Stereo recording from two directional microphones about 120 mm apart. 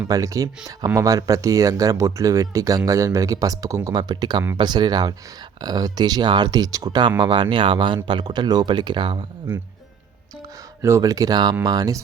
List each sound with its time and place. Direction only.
0.1 s speech: 30° right (ahead or behind)
10.8 s speech: 25° right (ahead or behind)